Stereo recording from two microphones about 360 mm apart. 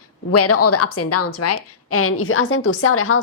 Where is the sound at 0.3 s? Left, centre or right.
Left.